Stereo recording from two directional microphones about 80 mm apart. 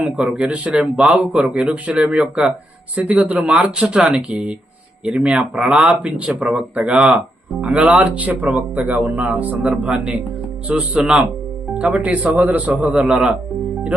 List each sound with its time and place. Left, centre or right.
0.3 s speech: centre